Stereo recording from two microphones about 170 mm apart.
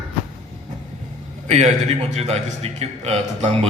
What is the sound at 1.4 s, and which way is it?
A man's voice, 40° right (ahead or behind).